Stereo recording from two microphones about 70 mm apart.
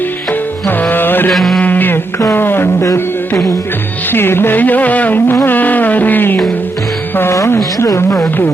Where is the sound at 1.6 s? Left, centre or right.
Left.